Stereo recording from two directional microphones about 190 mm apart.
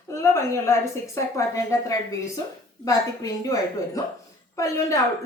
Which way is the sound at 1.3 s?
15° left (ahead or behind).